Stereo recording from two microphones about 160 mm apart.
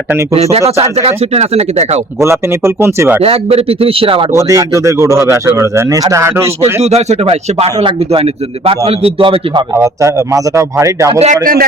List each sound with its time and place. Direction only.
0.8 s a man's voice: 40° right (ahead or behind)
2.2 s speech: 15° right (ahead or behind)
3.2 s a man's voice: 40° right (ahead or behind)
4.3 s speech: 20° right (ahead or behind)
6.8 s a man's voice: 40° right (ahead or behind)
9.7 s speech: 20° right (ahead or behind)
11.1 s a man's voice: 40° right (ahead or behind)